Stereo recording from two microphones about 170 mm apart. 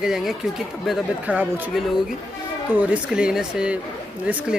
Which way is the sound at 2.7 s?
10° right (ahead or behind).